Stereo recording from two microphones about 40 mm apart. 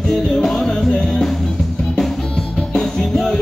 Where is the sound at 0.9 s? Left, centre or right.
Centre.